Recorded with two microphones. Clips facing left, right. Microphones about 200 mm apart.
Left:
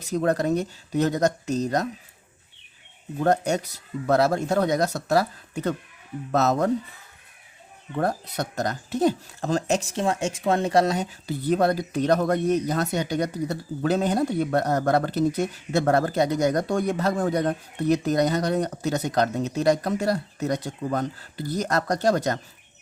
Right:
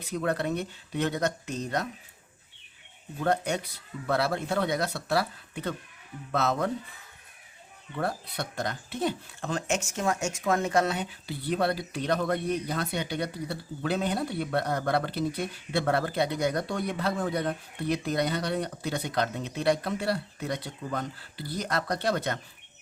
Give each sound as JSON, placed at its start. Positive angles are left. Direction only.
{"t": 0.0, "sound": "speech", "side_deg": 40}
{"t": 3.2, "sound": "speech", "side_deg": 40}
{"t": 7.9, "sound": "speech", "side_deg": 45}